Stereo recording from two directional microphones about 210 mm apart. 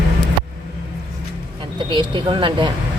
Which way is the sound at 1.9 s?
20° right (ahead or behind).